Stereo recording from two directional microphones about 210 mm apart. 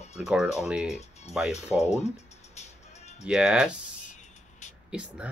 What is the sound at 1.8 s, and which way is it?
Speech, 30° left (ahead or behind).